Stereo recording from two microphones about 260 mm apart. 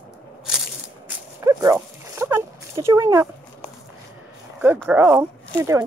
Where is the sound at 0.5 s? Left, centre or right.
Centre.